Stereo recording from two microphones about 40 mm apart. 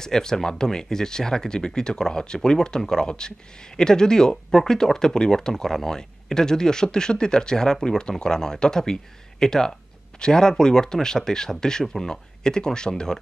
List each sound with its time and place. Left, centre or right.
0.0 s speech: centre